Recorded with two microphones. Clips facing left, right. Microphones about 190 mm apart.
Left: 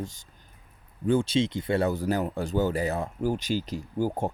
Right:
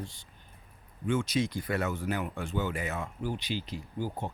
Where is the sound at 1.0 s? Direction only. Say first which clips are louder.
Left 5 dB; 30° left (ahead or behind).